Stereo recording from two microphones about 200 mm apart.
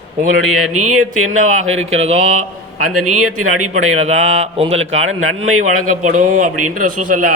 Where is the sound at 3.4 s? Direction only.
90° right.